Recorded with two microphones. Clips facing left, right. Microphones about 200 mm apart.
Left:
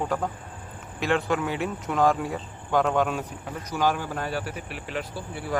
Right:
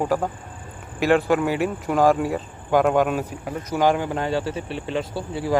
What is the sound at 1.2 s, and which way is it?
Speech, 5° right (ahead or behind).